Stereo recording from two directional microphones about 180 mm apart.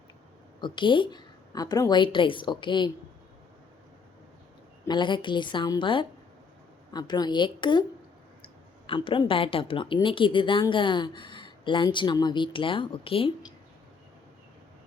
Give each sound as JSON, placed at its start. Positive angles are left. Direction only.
{"t": 0.6, "sound": "a woman's voice", "side_deg": 25}
{"t": 4.9, "sound": "a woman's voice", "side_deg": 25}
{"t": 8.9, "sound": "a woman's voice", "side_deg": 30}